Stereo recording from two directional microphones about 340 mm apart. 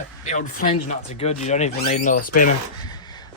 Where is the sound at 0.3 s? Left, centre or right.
Left.